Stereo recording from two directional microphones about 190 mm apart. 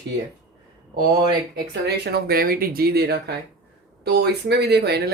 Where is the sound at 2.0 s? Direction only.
55° right (ahead or behind).